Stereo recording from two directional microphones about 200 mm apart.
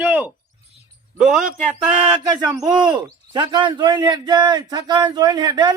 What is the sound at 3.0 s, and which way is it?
Speech, 20° right (ahead or behind).